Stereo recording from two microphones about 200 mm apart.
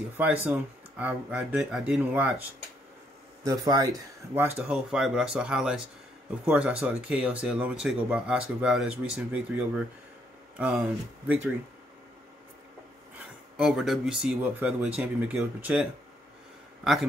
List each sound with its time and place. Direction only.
0.5 s speech: 5° right (ahead or behind)
3.4 s speech: 20° right (ahead or behind)
4.6 s speech: 5° right (ahead or behind)
10.6 s speech: 5° right (ahead or behind)
13.6 s speech: centre (ahead or behind)